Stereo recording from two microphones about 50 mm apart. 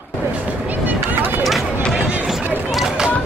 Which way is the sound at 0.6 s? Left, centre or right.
Right.